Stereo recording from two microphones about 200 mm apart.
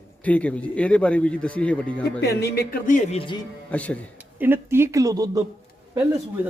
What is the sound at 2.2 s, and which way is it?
Speech, 55° left (ahead or behind).